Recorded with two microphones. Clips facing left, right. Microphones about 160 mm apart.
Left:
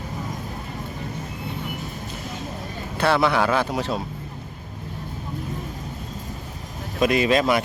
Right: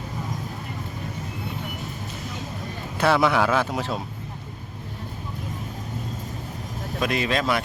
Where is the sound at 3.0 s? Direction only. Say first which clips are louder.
Even; 5° right (ahead or behind).